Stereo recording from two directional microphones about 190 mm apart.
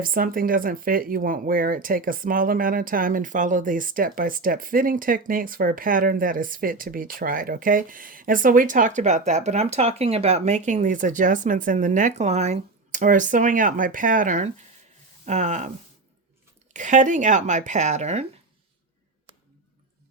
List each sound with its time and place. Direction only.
0.0 s speech: 50° right (ahead or behind)
16.7 s speech: 40° right (ahead or behind)